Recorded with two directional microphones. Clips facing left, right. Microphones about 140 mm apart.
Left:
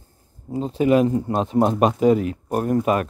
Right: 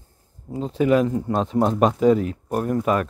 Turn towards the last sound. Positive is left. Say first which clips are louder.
# left 1 dB
turn(degrees=20)  # may be behind; listen again after turning